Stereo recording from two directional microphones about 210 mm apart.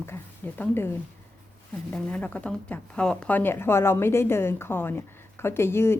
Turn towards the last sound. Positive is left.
turn(degrees=10)  # may be behind; listen again after turning